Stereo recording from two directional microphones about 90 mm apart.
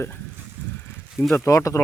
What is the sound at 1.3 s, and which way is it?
Speech, 30° left (ahead or behind).